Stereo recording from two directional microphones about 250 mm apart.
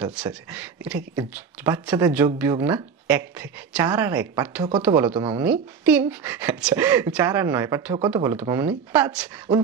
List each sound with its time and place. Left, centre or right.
0.0 s speech: centre
5.1 s speech: right
5.4 s speech: centre